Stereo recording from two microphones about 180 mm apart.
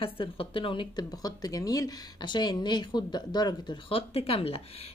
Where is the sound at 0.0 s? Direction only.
30° left (ahead or behind).